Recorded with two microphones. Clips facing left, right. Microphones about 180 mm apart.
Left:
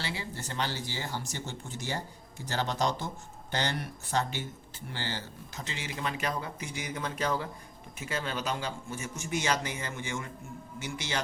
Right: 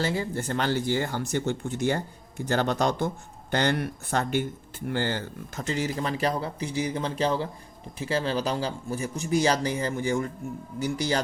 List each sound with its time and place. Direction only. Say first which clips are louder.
0.0 s speech: right 10 dB; 45° right (ahead or behind)